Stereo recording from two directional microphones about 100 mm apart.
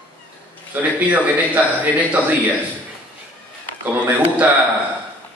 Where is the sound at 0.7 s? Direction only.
15° right (ahead or behind).